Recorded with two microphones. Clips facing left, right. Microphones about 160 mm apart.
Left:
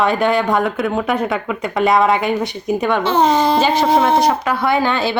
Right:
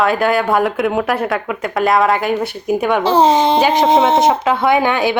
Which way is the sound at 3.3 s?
20° right (ahead or behind).